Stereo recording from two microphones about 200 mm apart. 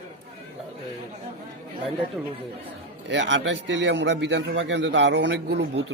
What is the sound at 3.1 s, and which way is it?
A man's voice, 65° right (ahead or behind).